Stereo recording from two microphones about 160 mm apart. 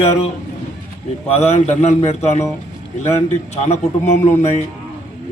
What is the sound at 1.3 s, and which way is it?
A man's voice, 40° left (ahead or behind).